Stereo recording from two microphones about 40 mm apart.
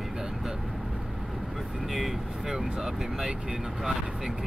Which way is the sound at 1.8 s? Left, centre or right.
Centre.